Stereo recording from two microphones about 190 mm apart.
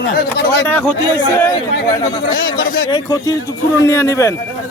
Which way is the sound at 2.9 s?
20° left (ahead or behind).